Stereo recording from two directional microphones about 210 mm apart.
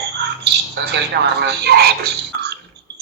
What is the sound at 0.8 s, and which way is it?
Speech, 60° right (ahead or behind).